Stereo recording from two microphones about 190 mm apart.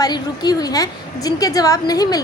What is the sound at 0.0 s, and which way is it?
A woman's voice, 20° left (ahead or behind).